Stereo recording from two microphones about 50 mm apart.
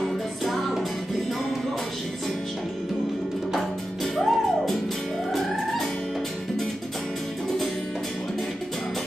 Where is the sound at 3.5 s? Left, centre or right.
Centre.